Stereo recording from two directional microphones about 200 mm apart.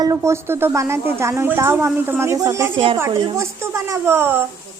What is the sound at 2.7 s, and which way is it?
A woman's voice, 25° right (ahead or behind).